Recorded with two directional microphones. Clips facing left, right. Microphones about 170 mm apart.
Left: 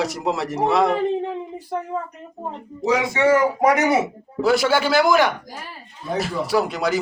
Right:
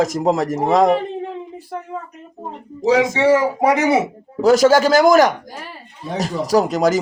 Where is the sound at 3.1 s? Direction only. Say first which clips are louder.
Right 2 dB; 25° right (ahead or behind).